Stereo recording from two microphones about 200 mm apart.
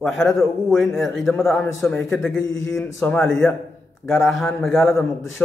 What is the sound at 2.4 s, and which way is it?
Speech, 70° left (ahead or behind).